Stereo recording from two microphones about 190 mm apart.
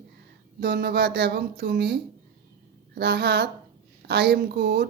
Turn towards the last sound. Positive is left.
turn(degrees=-60)  # may be behind; listen again after turning